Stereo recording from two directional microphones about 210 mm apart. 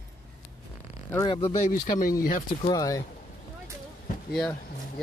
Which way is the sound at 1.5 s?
40° left (ahead or behind).